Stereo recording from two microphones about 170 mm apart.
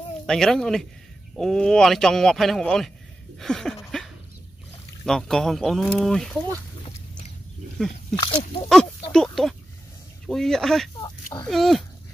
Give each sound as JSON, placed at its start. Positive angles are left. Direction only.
{"t": 0.3, "sound": "speech", "side_deg": 5}
{"t": 5.0, "sound": "speech", "side_deg": 5}
{"t": 7.8, "sound": "speech", "side_deg": 5}
{"t": 8.2, "sound": "speech", "side_deg": 30}
{"t": 9.1, "sound": "speech", "side_deg": 5}